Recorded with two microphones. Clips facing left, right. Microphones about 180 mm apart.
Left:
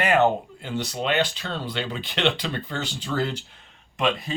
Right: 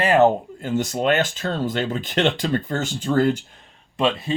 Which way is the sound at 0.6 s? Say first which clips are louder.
Right 6 dB; 45° right (ahead or behind).